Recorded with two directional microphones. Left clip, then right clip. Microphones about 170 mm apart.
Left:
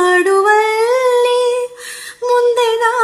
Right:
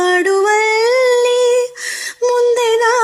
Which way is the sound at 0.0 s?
35° right (ahead or behind).